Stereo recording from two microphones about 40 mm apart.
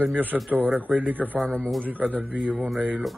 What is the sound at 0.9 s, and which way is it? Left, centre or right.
Speech, right.